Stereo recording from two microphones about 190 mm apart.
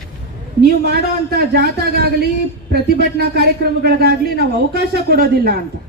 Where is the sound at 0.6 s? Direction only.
55° right (ahead or behind).